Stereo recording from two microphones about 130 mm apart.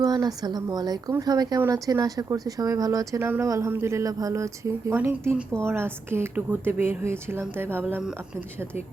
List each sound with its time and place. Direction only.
0.0 s a woman's voice: 30° right (ahead or behind)